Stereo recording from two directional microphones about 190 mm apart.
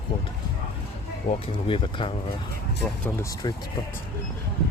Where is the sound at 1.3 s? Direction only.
30° left (ahead or behind).